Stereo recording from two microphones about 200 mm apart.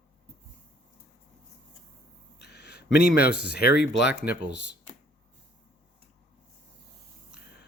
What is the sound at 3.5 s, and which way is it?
Speech, 55° left (ahead or behind).